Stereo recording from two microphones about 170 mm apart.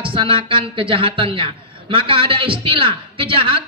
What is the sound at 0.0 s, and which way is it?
Speech, 30° right (ahead or behind).